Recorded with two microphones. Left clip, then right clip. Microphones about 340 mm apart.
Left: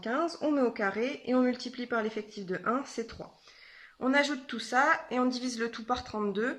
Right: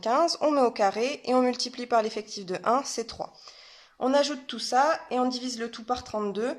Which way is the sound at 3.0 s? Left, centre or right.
Right.